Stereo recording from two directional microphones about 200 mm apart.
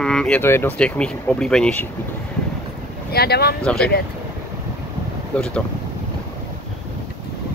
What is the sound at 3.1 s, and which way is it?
Speech, 50° left (ahead or behind).